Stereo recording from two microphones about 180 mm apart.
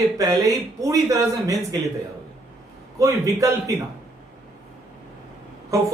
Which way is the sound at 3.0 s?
15° right (ahead or behind).